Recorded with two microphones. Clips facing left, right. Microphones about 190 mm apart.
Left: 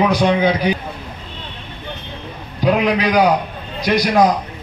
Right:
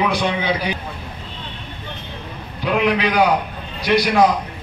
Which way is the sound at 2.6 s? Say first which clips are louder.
Left 3 dB; 40° left (ahead or behind).